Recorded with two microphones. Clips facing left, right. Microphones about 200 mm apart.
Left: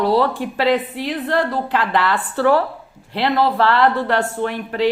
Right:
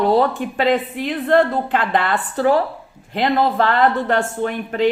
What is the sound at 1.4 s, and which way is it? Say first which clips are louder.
Speech: right 3 dB; 20° right (ahead or behind).